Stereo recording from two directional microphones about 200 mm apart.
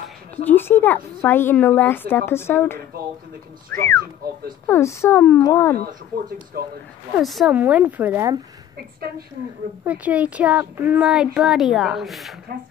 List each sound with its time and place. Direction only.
0.5 s a woman's voice: 10° left (ahead or behind)
6.5 s speech: 50° right (ahead or behind)
7.2 s speech: centre (ahead or behind)
9.8 s speech: 5° right (ahead or behind)